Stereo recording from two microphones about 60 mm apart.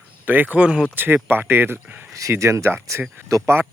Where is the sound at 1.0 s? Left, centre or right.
Right.